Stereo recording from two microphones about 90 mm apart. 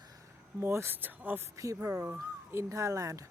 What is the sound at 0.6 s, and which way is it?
Speech, 30° right (ahead or behind).